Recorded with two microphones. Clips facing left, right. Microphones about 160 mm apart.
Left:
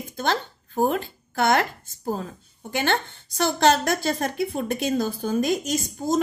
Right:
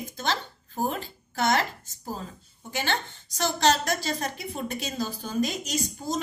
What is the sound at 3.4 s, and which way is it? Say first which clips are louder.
A woman's voice: left 4 dB; 55° left (ahead or behind).